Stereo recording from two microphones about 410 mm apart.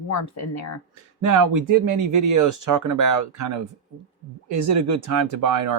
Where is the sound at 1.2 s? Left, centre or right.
Right.